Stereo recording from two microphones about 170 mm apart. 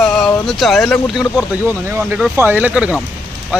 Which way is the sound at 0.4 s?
Centre (ahead or behind).